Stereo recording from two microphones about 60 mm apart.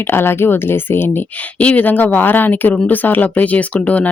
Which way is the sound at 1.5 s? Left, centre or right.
Left.